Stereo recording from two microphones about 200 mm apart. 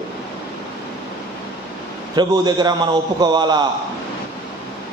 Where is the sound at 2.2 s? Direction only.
20° right (ahead or behind).